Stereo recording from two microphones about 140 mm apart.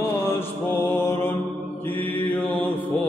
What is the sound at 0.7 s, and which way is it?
Mantra, 15° left (ahead or behind).